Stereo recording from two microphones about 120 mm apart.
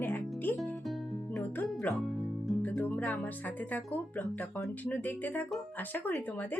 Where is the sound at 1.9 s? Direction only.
15° left (ahead or behind).